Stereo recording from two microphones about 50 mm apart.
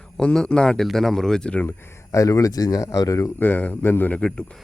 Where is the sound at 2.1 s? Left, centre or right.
Left.